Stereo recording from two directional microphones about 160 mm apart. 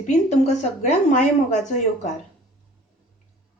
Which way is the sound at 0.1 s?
45° left (ahead or behind).